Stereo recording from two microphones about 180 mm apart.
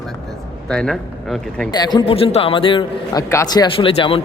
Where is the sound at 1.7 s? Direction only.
25° left (ahead or behind).